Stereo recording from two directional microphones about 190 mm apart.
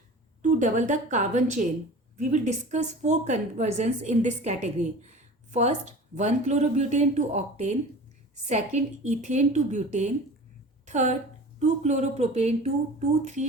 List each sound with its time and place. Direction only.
0.4 s a woman's voice: 40° right (ahead or behind)